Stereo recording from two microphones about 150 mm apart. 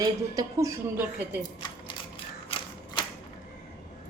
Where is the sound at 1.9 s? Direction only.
35° left (ahead or behind).